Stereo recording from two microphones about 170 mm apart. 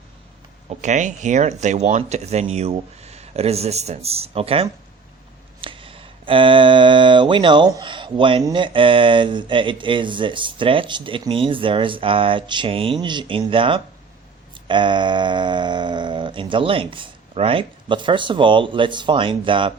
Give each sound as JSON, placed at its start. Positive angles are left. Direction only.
{"t": 0.8, "sound": "speech", "side_deg": -45}